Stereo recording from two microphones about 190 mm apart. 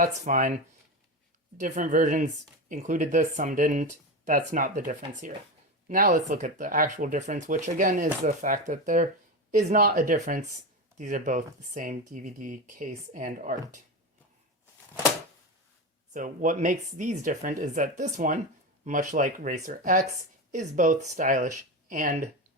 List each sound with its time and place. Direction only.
0.2 s speech: 40° right (ahead or behind)
16.1 s speech: 45° right (ahead or behind)